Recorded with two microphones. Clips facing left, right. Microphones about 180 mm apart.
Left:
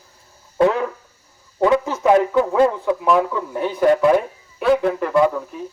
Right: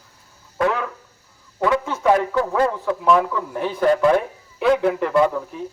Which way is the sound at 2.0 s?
20° left (ahead or behind).